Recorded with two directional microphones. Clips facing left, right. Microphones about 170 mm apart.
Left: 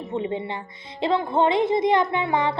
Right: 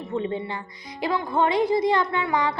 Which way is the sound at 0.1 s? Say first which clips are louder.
Even; 20° left (ahead or behind).